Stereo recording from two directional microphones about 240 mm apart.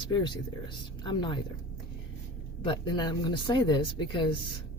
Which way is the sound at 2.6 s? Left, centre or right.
Centre.